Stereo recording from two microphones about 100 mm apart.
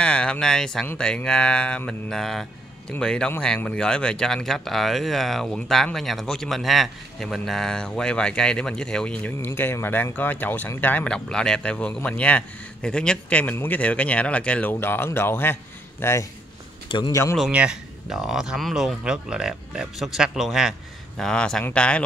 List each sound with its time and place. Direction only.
0.0 s a man's voice: 10° left (ahead or behind)
9.5 s a man's voice: 25° left (ahead or behind)
17.5 s a man's voice: 10° right (ahead or behind); by 22.0 s 10° left (ahead or behind)